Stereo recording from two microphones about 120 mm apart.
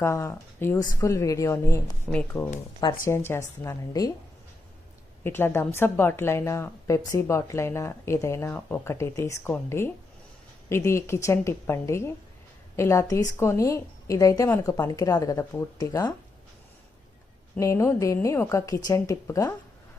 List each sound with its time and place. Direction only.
0.0 s a woman's voice: 25° left (ahead or behind)
2.0 s speech: 10° left (ahead or behind)
3.1 s a woman's voice: 20° left (ahead or behind)
5.2 s a woman's voice: 20° left (ahead or behind)
17.6 s a woman's voice: 25° left (ahead or behind)